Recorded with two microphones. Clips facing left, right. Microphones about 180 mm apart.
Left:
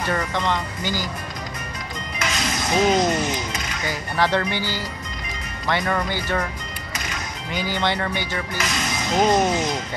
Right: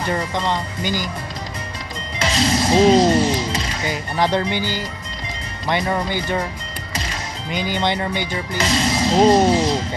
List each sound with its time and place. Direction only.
0.1 s speech: 25° right (ahead or behind)
2.1 s music: 30° right (ahead or behind)
3.9 s speech: 20° right (ahead or behind)
7.5 s speech: 15° right (ahead or behind)
8.5 s speech: 30° right (ahead or behind)